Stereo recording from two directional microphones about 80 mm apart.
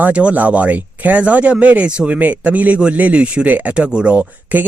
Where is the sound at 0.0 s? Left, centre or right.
Centre.